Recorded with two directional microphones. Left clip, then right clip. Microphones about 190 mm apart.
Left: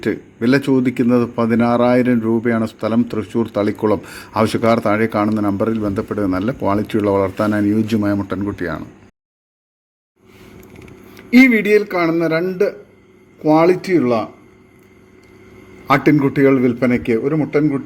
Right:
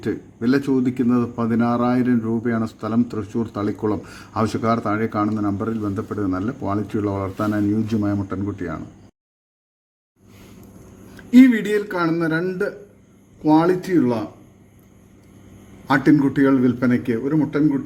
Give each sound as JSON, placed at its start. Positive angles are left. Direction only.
{"t": 0.0, "sound": "speech", "side_deg": 10}
{"t": 11.3, "sound": "speech", "side_deg": 15}
{"t": 15.9, "sound": "speech", "side_deg": 15}